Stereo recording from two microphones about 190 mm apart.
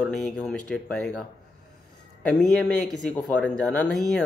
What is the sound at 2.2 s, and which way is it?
Speech, centre (ahead or behind).